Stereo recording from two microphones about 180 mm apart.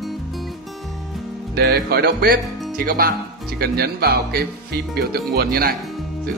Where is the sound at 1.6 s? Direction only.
65° right (ahead or behind).